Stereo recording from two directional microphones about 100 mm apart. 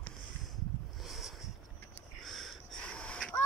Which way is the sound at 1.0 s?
5° right (ahead or behind).